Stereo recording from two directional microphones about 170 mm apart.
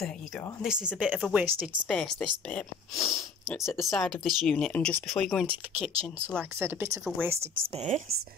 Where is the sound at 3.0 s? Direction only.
15° left (ahead or behind).